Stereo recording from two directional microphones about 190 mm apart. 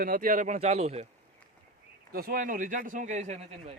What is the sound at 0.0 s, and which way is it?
Speech, 50° right (ahead or behind).